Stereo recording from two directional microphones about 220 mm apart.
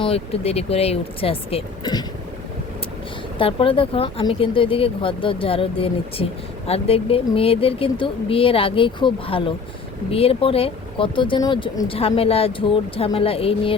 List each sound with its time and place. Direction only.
0.0 s speech: 25° left (ahead or behind)
3.3 s speech: 25° left (ahead or behind)